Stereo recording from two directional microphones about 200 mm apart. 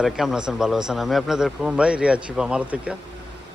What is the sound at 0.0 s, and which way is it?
Speech, centre (ahead or behind).